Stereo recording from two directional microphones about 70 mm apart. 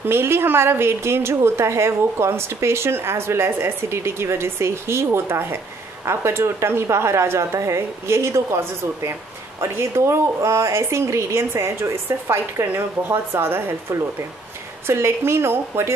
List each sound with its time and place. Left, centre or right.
0.0 s a woman's voice: right